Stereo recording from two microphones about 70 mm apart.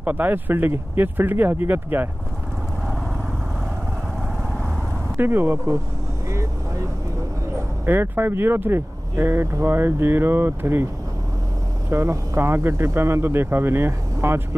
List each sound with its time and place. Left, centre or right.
0.0 s speech: right
5.1 s speech: right
7.8 s speech: right
11.9 s speech: right